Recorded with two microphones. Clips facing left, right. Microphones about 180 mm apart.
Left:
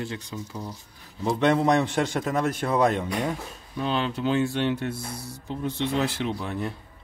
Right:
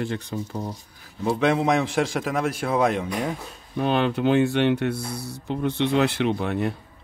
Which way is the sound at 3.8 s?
60° right (ahead or behind).